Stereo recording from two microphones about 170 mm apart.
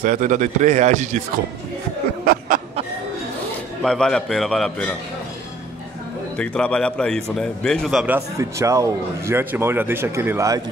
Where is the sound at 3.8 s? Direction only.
5° left (ahead or behind).